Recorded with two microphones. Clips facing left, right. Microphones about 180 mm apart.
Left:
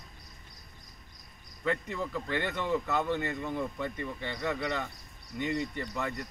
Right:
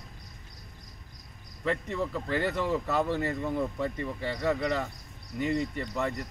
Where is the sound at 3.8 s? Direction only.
30° right (ahead or behind).